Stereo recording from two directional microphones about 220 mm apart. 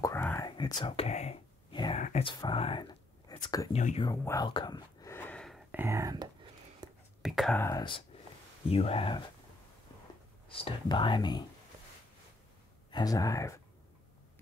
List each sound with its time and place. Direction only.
0.0 s whispering: 10° left (ahead or behind)
2.0 s a sound: 30° left (ahead or behind)
3.4 s speech: 15° left (ahead or behind)
3.7 s speech: 30° left (ahead or behind)
4.1 s a sound: 15° left (ahead or behind)
5.7 s speech: 10° right (ahead or behind)
6.8 s whispering: 15° right (ahead or behind)
7.2 s speech: centre (ahead or behind)
7.6 s speech: 20° left (ahead or behind)
10.5 s speech: 25° left (ahead or behind)
12.9 s speech: 15° left (ahead or behind)